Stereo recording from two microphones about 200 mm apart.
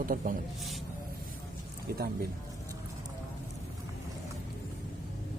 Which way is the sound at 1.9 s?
50° right (ahead or behind).